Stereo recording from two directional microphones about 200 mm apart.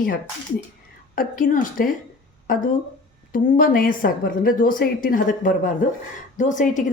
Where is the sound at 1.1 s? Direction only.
45° left (ahead or behind).